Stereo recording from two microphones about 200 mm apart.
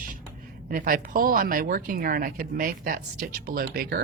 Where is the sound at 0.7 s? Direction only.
45° right (ahead or behind).